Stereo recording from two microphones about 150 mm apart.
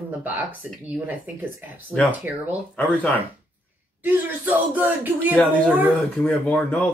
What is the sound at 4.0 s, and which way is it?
Speech, 10° right (ahead or behind).